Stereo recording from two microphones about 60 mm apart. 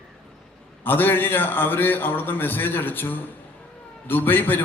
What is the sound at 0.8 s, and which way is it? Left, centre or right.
A man's voice, left.